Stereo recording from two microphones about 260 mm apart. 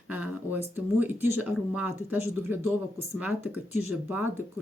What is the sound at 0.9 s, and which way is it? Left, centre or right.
Speech, centre.